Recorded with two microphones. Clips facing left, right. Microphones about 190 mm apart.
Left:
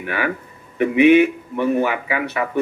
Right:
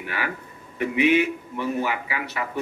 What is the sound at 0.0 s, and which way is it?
A man's voice, 60° left (ahead or behind).